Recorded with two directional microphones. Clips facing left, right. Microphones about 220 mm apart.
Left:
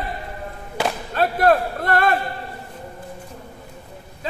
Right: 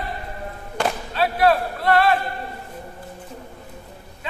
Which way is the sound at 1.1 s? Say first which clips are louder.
Left 2 dB; 50° left (ahead or behind).